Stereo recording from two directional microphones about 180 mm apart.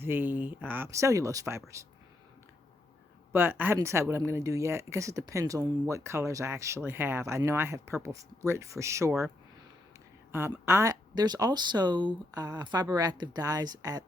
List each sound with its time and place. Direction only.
0.0 s speech: 10° right (ahead or behind)
3.3 s speech: 10° right (ahead or behind)
10.3 s speech: 15° right (ahead or behind)